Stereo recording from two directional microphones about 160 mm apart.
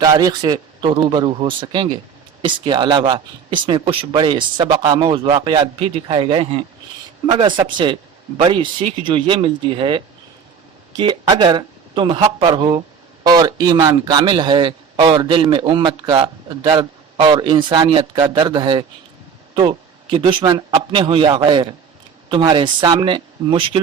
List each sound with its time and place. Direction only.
0.0 s a man's voice: 25° right (ahead or behind)
11.0 s a man's voice: 30° right (ahead or behind)